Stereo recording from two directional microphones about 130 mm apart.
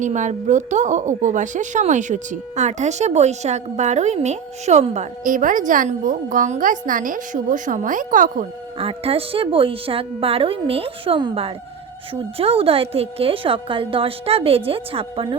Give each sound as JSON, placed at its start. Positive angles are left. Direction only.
{"t": 0.0, "sound": "a woman's voice", "side_deg": -70}
{"t": 8.8, "sound": "a woman's voice", "side_deg": -45}